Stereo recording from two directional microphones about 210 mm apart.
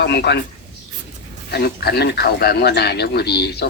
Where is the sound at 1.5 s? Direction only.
50° left (ahead or behind).